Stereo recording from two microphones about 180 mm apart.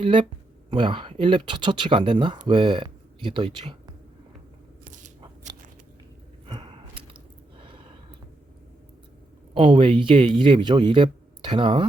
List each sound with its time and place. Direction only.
0.0 s speech: 30° right (ahead or behind)
6.4 s a sound: 30° right (ahead or behind)
9.6 s speech: 25° right (ahead or behind)